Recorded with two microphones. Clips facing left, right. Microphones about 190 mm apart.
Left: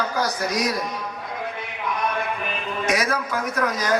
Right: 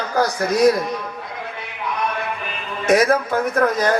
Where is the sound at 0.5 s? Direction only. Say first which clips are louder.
Right 14 dB; 55° right (ahead or behind).